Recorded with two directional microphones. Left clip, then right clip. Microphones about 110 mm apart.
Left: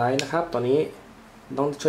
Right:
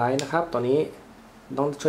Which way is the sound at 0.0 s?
Centre (ahead or behind).